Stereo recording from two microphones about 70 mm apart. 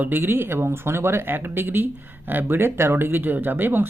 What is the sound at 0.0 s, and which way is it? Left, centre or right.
Speech, right.